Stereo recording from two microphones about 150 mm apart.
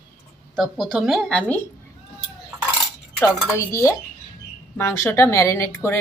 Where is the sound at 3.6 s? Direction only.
20° left (ahead or behind).